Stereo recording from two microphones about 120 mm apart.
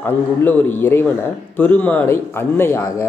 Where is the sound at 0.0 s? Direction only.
15° left (ahead or behind).